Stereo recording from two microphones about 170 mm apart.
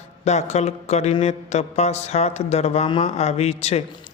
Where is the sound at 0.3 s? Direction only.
40° left (ahead or behind).